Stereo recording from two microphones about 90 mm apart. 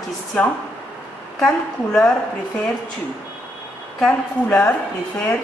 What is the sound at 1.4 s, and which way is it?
Speech, 10° left (ahead or behind).